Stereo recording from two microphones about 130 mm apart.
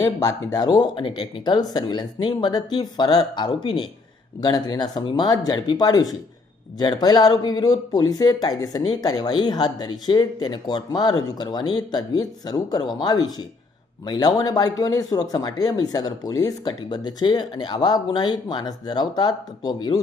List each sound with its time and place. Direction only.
0.0 s speech: 30° left (ahead or behind)